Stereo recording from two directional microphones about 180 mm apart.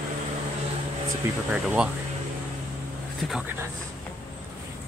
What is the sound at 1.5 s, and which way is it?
Speech, 5° right (ahead or behind).